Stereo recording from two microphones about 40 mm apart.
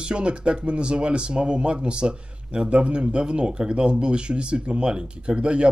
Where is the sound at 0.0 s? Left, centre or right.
Right.